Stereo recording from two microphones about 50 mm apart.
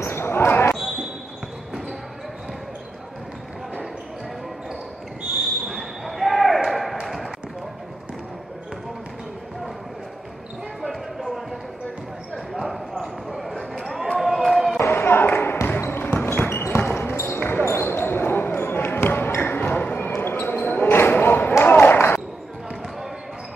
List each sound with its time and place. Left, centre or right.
0.0 s basketball bounce: left
5.7 s basketball bounce: centre
10.8 s basketball bounce: centre
12.5 s basketball bounce: centre
13.7 s a sound: centre
14.9 s a sound: left
15.8 s basketball bounce: left